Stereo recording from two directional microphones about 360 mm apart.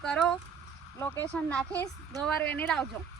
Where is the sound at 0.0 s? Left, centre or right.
Centre.